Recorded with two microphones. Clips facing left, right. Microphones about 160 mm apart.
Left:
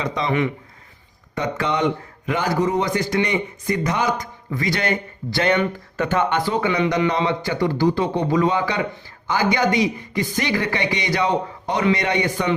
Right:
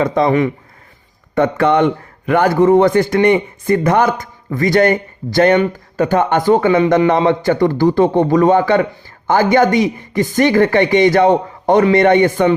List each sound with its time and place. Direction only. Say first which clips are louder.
0.0 s a man's voice: right 8 dB; 50° right (ahead or behind)
1.4 s a man's voice: right 9 dB; 55° right (ahead or behind)